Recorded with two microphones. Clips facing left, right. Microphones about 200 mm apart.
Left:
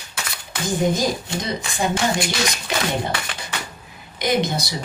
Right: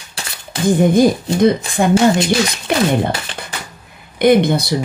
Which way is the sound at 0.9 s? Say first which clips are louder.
Right 11 dB; 55° right (ahead or behind).